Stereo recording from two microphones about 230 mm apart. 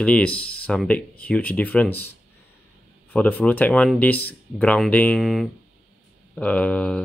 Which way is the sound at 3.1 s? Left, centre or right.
Centre.